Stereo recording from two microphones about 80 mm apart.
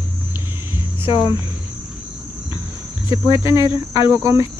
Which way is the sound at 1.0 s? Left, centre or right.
Left.